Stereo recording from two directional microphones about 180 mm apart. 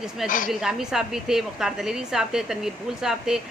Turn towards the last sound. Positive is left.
turn(degrees=-5)  # may be behind; listen again after turning